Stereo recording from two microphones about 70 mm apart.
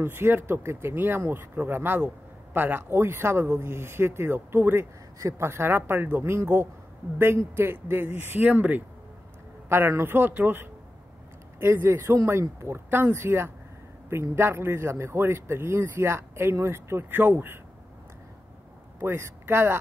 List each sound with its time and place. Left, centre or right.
0.0 s speech: right
9.7 s speech: right
18.9 s speech: right